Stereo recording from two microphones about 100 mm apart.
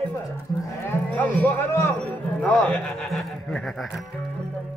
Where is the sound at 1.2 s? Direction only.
20° left (ahead or behind).